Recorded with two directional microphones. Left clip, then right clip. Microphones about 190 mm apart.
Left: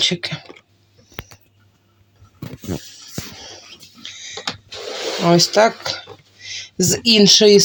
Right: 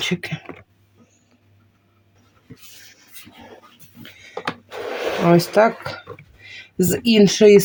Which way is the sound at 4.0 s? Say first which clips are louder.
Left 2 dB; 20° right (ahead or behind).